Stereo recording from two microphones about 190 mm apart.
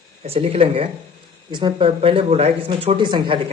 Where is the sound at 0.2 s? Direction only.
35° right (ahead or behind).